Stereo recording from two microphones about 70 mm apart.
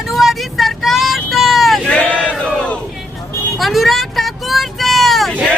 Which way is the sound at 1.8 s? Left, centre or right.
Centre.